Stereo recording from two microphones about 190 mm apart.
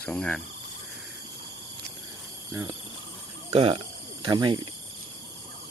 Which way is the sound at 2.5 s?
15° right (ahead or behind).